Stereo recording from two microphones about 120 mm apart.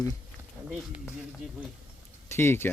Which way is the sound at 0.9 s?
10° right (ahead or behind).